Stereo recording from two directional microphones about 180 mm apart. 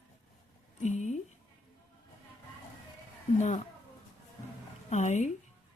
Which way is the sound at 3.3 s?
40° left (ahead or behind).